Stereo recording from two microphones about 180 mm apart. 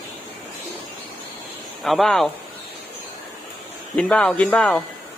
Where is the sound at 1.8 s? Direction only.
Centre (ahead or behind).